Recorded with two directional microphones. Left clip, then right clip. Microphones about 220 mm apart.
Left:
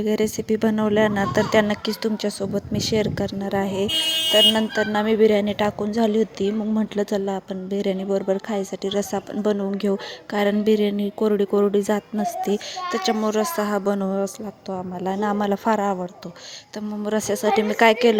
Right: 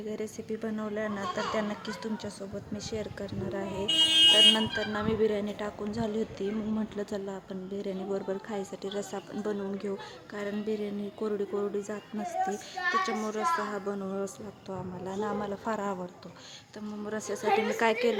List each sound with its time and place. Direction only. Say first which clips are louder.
0.0 s speech: left 14 dB; 35° left (ahead or behind)
17.1 s speech: left 8 dB; 30° left (ahead or behind)